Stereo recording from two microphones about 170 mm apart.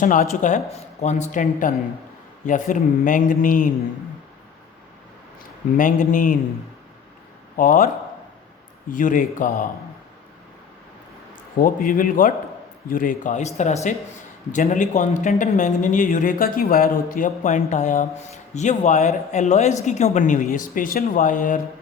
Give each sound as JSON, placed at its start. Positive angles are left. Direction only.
{"t": 0.0, "sound": "speech", "side_deg": 50}
{"t": 5.7, "sound": "speech", "side_deg": 50}
{"t": 7.5, "sound": "a man's voice", "side_deg": 55}
{"t": 8.9, "sound": "speech", "side_deg": 50}
{"t": 11.5, "sound": "a man's voice", "side_deg": 55}